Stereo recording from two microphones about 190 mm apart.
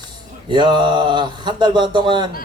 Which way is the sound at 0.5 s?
25° right (ahead or behind).